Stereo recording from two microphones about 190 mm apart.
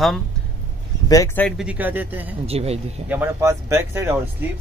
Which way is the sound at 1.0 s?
15° left (ahead or behind).